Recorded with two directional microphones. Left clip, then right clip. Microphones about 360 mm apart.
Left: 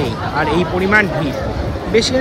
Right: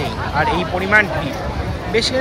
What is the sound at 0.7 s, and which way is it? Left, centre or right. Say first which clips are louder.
Speech: even; centre.